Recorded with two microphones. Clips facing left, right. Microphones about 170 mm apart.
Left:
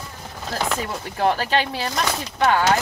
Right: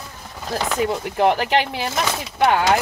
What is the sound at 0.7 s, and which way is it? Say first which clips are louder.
Speech: right 6 dB; 15° right (ahead or behind).